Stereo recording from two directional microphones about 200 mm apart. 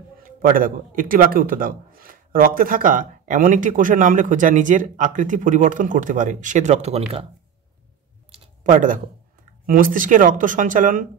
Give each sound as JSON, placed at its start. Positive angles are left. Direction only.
{"t": 0.2, "sound": "a man's voice", "side_deg": -45}
{"t": 8.6, "sound": "a man's voice", "side_deg": -40}